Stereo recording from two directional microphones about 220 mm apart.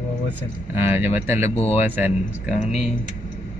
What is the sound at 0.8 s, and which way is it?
Speech, 10° right (ahead or behind).